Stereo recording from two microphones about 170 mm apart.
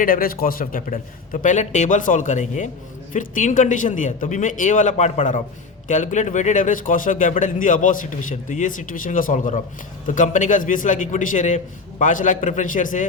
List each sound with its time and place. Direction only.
0.0 s speech: 60° left (ahead or behind)